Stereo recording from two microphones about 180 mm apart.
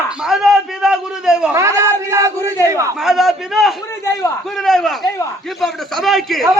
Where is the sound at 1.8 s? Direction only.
15° right (ahead or behind).